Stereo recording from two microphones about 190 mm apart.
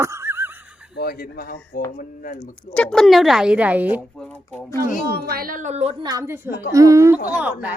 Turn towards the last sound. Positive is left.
turn(degrees=-10)  # may be behind; listen again after turning